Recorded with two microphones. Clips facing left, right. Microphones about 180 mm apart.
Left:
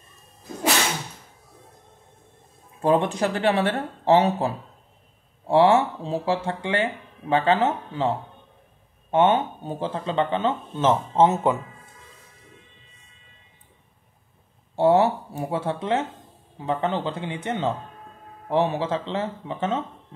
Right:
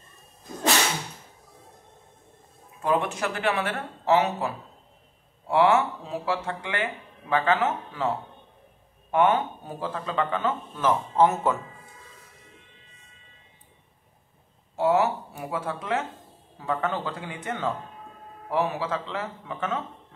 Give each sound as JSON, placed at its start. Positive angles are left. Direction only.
{"t": 2.8, "sound": "speech", "side_deg": 30}
{"t": 9.1, "sound": "speech", "side_deg": 25}
{"t": 14.8, "sound": "speech", "side_deg": 30}